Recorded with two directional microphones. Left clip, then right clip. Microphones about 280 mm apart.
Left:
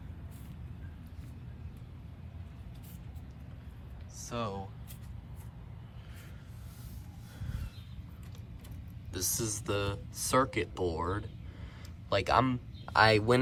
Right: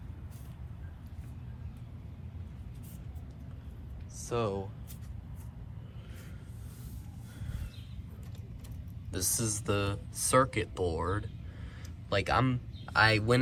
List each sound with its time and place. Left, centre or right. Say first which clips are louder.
4.2 s speech: right 5 dB; centre
9.1 s speech: right 1 dB; centre; by 13.4 s left